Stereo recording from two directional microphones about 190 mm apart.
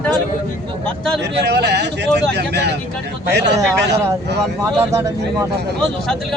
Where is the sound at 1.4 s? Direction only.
60° right (ahead or behind).